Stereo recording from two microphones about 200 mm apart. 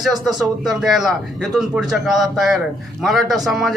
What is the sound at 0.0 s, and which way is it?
A man's voice, centre (ahead or behind).